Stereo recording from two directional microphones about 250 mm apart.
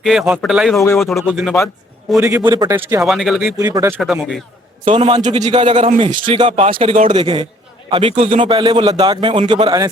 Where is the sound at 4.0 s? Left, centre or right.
Centre.